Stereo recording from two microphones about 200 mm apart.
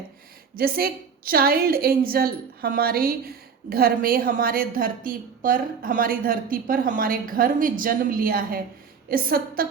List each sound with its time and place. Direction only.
0.5 s a woman's voice: 45° right (ahead or behind)